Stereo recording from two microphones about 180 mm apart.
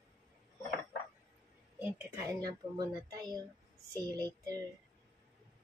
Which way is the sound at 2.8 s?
25° right (ahead or behind).